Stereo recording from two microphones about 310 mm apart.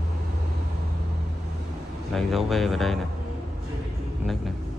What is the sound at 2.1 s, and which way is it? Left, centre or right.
Speech, centre.